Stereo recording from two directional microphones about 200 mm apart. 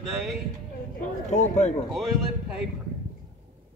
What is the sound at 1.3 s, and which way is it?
Speech, 35° left (ahead or behind).